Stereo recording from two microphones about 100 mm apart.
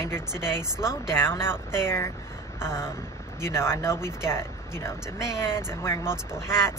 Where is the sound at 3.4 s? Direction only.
25° left (ahead or behind).